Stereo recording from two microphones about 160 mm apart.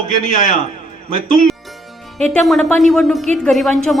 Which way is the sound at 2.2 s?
Centre (ahead or behind).